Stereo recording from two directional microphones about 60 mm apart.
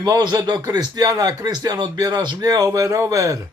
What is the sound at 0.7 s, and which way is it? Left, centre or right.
Speech, right.